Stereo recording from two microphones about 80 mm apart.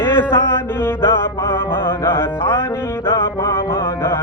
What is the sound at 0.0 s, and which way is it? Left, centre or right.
Music, left.